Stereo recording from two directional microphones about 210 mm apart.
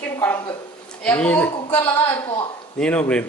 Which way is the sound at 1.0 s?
5° left (ahead or behind).